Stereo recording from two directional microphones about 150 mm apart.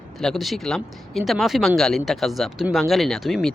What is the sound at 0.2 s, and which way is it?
Speech, centre (ahead or behind).